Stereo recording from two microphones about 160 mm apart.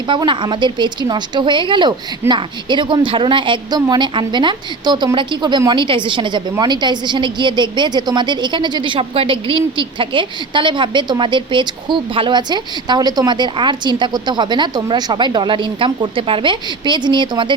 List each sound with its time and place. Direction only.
0.1 s a woman's voice: 30° right (ahead or behind)